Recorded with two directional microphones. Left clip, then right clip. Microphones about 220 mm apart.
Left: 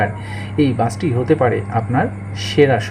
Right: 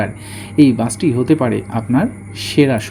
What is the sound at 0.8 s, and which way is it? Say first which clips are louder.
Speech: right 1 dB; 35° right (ahead or behind).